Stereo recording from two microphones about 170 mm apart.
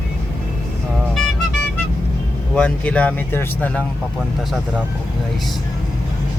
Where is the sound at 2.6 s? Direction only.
5° left (ahead or behind).